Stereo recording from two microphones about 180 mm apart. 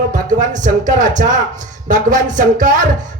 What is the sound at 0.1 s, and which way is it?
Speech, 45° right (ahead or behind).